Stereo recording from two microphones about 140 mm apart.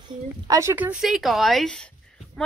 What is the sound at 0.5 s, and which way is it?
A woman's voice, 20° right (ahead or behind).